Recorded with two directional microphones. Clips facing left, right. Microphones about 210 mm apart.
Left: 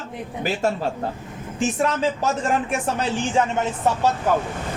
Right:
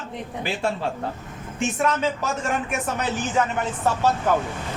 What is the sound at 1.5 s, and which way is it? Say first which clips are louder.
Speech: left 1 dB; 35° left (ahead or behind).